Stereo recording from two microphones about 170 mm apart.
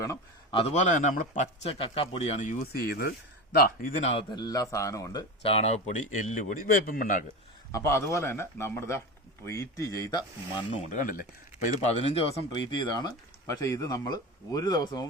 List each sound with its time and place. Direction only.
0.5 s speech: 40° left (ahead or behind)
1.4 s a man's voice: 35° left (ahead or behind)
2.7 s speech: 70° left (ahead or behind); by 4.1 s 50° left (ahead or behind)
4.1 s speech: 30° left (ahead or behind)
5.4 s speech: 35° left (ahead or behind); by 7.2 s 55° left (ahead or behind)
7.7 s speech: 15° left (ahead or behind)
10.9 s speech: 55° left (ahead or behind)
11.9 s a man's voice: 40° left (ahead or behind); by 15.0 s 25° left (ahead or behind)